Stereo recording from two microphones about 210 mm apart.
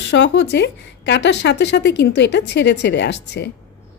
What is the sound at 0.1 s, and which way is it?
Speech, 55° left (ahead or behind).